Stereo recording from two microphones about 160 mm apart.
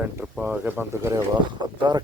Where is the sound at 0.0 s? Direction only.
10° right (ahead or behind).